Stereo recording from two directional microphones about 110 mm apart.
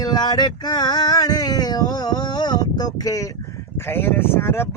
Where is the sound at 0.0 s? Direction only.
40° left (ahead or behind).